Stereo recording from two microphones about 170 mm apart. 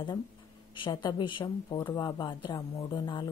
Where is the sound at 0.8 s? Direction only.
30° left (ahead or behind).